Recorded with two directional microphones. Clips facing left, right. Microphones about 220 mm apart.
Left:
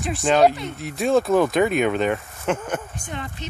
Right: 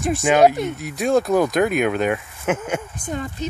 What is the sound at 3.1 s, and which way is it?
Speech, 40° right (ahead or behind).